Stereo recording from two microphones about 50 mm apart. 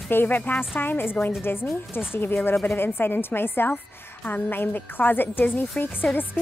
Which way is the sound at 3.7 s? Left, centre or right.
Left.